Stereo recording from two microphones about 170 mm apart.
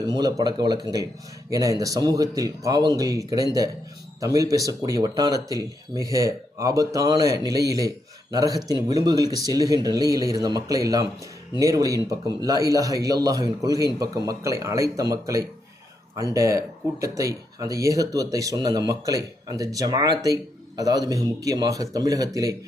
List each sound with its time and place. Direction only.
0.0 s speech: 25° right (ahead or behind)